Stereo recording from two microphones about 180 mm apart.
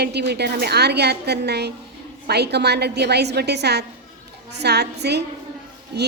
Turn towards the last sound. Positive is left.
turn(degrees=-65)  # may be behind; listen again after turning